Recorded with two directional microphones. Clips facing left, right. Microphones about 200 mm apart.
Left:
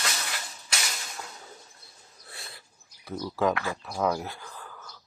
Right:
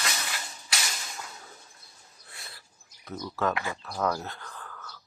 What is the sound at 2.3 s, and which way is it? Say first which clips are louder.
Dog: left 3 dB; 25° left (ahead or behind).